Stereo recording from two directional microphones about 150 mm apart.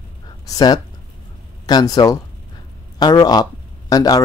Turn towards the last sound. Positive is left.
turn(degrees=25)  # may be behind; listen again after turning